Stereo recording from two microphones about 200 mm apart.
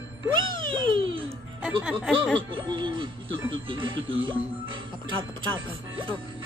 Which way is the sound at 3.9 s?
75° right (ahead or behind).